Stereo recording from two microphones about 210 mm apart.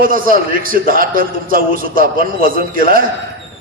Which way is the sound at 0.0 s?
40° right (ahead or behind).